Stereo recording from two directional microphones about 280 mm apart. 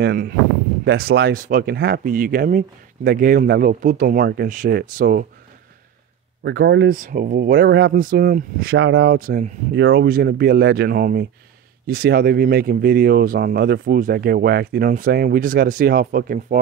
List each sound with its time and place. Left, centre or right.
0.0 s speech: right
6.4 s speech: right